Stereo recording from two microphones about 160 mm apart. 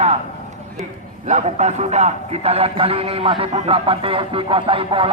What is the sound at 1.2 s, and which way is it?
A man's voice, 45° right (ahead or behind).